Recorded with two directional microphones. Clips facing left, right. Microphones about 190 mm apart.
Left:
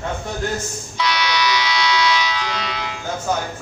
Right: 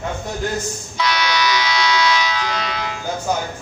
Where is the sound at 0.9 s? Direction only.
45° right (ahead or behind).